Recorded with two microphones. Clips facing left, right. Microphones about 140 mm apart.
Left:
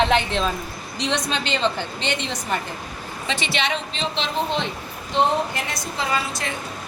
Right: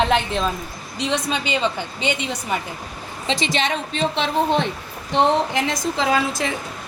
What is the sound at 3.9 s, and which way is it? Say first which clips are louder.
Speech: right 5 dB; 55° right (ahead or behind).